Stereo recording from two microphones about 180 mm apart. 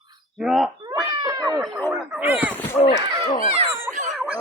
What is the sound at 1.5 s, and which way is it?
Speech, centre (ahead or behind).